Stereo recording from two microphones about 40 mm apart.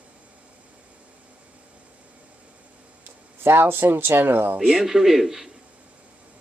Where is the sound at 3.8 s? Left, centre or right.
Right.